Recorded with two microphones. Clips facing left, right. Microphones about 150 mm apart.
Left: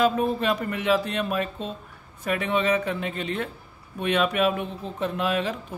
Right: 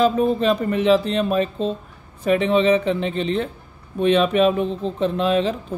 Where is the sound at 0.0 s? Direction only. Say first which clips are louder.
Right 5 dB; 30° right (ahead or behind).